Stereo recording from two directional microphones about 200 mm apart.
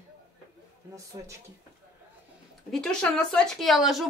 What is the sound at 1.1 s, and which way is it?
Speech, 15° right (ahead or behind).